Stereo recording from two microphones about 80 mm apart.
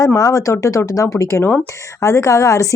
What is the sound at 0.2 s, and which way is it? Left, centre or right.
Speech, left.